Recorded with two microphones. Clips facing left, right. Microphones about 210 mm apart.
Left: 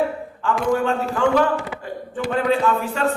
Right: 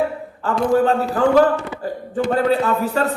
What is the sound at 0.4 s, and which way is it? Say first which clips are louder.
Speech: right 4 dB; 35° right (ahead or behind).